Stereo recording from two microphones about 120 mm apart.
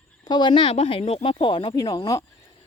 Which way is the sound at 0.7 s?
50° left (ahead or behind).